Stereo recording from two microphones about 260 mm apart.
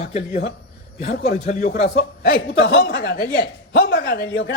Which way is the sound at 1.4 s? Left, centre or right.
Left.